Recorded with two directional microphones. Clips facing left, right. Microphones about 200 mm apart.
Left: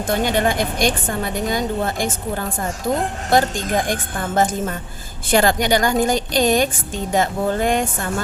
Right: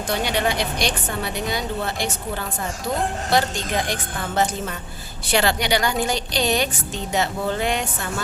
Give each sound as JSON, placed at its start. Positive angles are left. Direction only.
{"t": 0.1, "sound": "a woman's voice", "side_deg": 45}
{"t": 5.3, "sound": "a woman's voice", "side_deg": 45}